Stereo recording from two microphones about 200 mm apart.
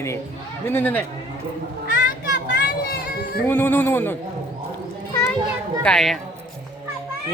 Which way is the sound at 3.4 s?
10° left (ahead or behind).